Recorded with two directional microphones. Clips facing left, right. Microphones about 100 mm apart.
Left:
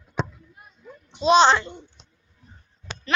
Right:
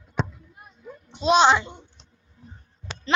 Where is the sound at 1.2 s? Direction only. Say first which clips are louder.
Left 1 dB; 5° right (ahead or behind).